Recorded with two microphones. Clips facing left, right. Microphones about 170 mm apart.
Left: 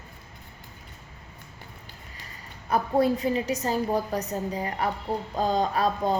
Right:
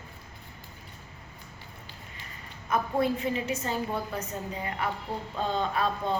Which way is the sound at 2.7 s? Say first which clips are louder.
Left 4 dB; 35° left (ahead or behind).